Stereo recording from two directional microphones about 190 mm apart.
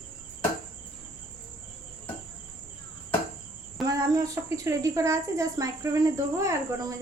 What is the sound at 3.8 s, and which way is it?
A woman's voice, 20° right (ahead or behind).